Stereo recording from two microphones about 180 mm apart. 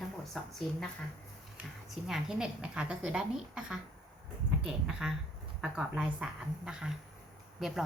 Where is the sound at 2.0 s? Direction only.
Centre (ahead or behind).